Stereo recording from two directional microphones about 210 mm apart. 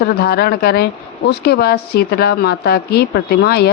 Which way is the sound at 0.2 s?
45° left (ahead or behind).